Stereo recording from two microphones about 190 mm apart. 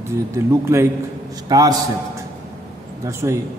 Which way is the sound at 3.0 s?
15° right (ahead or behind).